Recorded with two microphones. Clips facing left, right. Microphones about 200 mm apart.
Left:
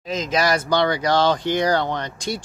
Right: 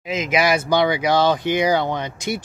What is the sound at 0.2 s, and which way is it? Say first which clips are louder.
Speech: right 2 dB; 10° right (ahead or behind).